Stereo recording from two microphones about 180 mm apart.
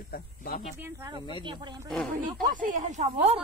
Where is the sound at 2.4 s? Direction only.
45° right (ahead or behind).